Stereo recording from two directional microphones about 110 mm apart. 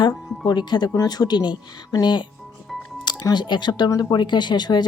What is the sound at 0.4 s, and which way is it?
Speech, 40° left (ahead or behind).